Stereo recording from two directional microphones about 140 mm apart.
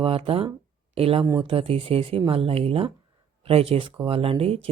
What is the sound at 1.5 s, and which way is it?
Speech, 40° right (ahead or behind).